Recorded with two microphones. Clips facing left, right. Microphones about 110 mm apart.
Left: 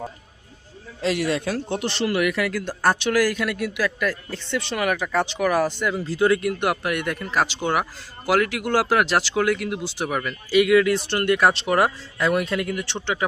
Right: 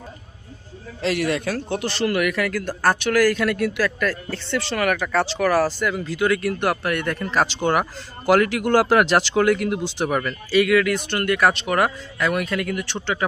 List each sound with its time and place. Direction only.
1.0 s a man's voice: 20° left (ahead or behind); by 10.3 s 5° left (ahead or behind)
10.5 s a man's voice: 20° left (ahead or behind)